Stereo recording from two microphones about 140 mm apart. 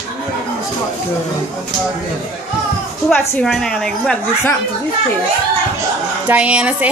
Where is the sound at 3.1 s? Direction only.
10° left (ahead or behind).